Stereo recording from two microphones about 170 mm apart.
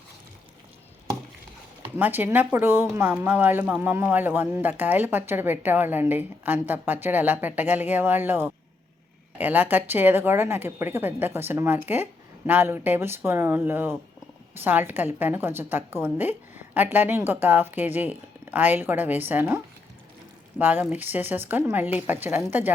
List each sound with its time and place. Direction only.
2.0 s speech: 10° right (ahead or behind)